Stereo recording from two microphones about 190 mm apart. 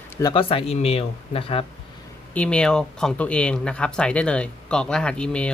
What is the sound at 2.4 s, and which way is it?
Speech, 5° left (ahead or behind).